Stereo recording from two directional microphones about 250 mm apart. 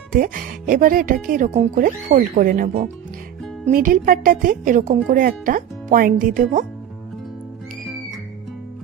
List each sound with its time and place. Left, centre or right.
0.1 s speech: right